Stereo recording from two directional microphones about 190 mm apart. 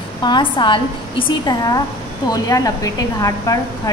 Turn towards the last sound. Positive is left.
turn(degrees=20)  # may be behind; listen again after turning